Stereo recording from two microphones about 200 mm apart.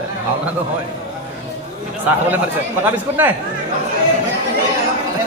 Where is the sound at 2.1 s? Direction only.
10° right (ahead or behind).